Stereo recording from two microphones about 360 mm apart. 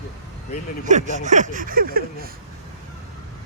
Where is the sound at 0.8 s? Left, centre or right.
Centre.